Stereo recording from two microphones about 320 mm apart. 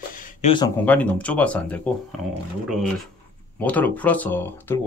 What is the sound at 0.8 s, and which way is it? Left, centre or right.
Speech, centre.